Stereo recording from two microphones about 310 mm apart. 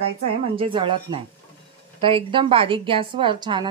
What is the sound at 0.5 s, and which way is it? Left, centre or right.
A woman's voice, centre.